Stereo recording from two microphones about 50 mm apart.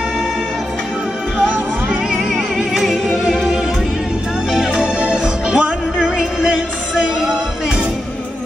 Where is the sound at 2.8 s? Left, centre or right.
Centre.